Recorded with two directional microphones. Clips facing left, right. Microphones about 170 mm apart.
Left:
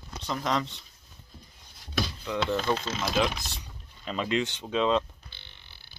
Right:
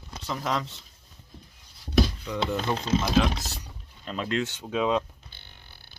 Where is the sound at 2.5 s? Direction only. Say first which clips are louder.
Right 2 dB; 35° right (ahead or behind).